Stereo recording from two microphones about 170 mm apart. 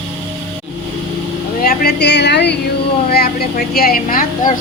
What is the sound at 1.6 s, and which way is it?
Speech, 75° left (ahead or behind).